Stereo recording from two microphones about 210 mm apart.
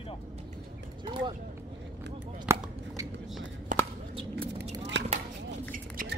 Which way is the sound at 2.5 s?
15° right (ahead or behind).